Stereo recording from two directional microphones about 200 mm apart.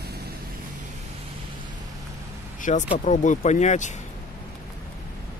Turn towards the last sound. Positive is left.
turn(degrees=35)  # may be behind; listen again after turning